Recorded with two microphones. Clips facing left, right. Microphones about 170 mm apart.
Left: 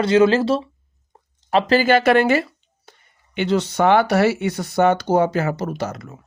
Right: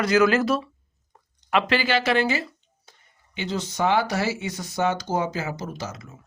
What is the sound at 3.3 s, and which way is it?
Speech, 70° left (ahead or behind).